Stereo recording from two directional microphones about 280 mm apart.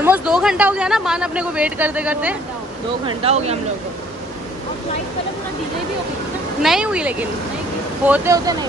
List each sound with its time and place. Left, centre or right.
0.0 s speech: centre
3.2 s speech: right
6.6 s speech: centre